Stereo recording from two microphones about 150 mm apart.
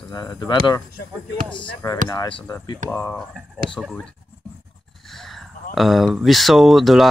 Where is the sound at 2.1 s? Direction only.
30° left (ahead or behind).